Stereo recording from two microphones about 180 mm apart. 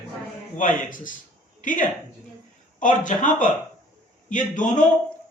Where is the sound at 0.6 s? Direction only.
45° left (ahead or behind).